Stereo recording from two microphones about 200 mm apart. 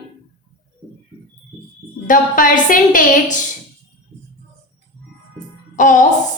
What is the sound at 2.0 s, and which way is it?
A woman's voice, 45° left (ahead or behind).